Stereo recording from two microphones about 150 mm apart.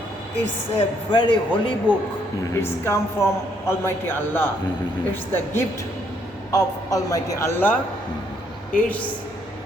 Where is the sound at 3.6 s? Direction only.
15° left (ahead or behind).